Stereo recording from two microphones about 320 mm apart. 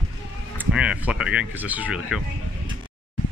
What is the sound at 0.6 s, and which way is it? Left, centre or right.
Speech, centre.